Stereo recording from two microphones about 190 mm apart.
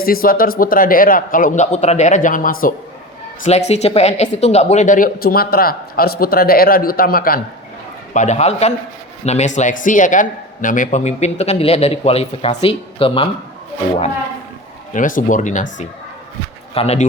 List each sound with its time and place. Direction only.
0.0 s speech: 50° left (ahead or behind)
3.4 s speech: 35° left (ahead or behind)
8.1 s a man's voice: 40° left (ahead or behind)
14.9 s speech: 45° left (ahead or behind)
16.7 s a man's voice: 35° left (ahead or behind)